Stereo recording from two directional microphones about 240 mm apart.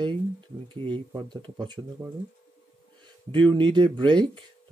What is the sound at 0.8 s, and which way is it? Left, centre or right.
Speech, centre.